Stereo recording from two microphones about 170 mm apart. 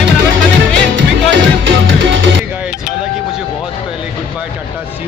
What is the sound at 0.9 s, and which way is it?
Music, 90° right.